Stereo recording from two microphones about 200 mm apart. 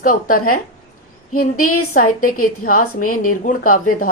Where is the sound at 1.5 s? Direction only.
90° left.